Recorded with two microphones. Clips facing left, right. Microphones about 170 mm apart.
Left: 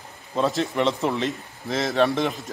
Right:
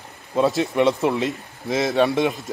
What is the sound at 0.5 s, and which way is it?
Speech, 20° right (ahead or behind).